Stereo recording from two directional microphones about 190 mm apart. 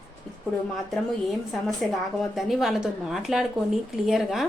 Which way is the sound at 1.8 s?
5° left (ahead or behind).